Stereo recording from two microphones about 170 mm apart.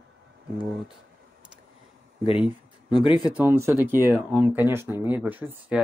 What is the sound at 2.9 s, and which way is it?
Speech, 25° left (ahead or behind).